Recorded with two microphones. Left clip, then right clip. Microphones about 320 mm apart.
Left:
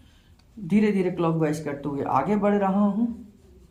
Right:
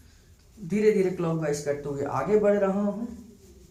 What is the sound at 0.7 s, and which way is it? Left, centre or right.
Speech, left.